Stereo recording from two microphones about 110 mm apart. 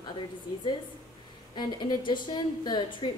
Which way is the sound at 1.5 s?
45° left (ahead or behind).